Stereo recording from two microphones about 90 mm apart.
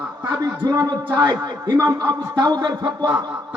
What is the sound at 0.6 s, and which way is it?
A man's voice, 45° right (ahead or behind).